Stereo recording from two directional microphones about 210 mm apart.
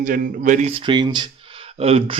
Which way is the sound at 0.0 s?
40° right (ahead or behind).